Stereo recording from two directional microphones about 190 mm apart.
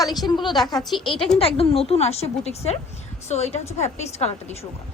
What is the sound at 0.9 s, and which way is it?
Speech, centre (ahead or behind).